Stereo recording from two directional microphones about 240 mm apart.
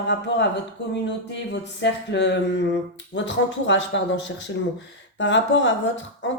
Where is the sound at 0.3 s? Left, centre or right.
Left.